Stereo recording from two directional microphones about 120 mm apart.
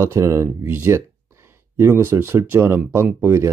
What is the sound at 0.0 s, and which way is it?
Speech, 25° right (ahead or behind).